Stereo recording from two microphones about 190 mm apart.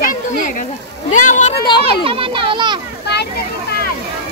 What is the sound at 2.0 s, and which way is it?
Children playing, 30° right (ahead or behind).